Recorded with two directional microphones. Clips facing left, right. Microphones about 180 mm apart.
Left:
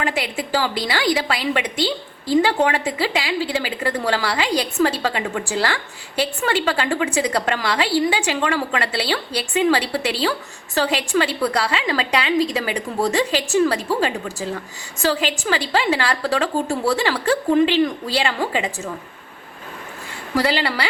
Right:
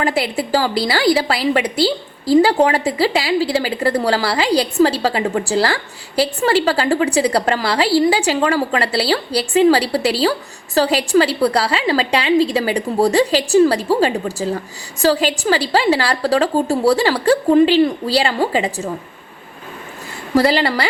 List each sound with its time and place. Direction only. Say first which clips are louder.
0.0 s a woman's voice: right 5 dB; 35° right (ahead or behind)
20.3 s a woman's voice: right 6 dB; 40° right (ahead or behind)